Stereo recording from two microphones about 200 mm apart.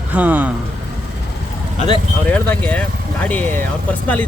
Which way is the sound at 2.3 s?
10° left (ahead or behind).